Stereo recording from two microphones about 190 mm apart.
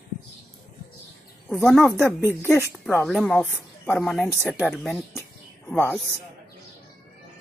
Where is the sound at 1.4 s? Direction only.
Centre (ahead or behind).